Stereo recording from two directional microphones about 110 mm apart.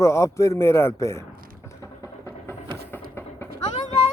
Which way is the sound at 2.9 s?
20° left (ahead or behind).